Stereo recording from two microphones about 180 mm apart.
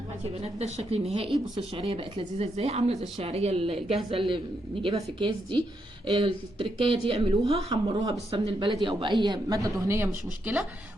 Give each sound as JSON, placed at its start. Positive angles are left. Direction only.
{"t": 0.4, "sound": "speech", "side_deg": -35}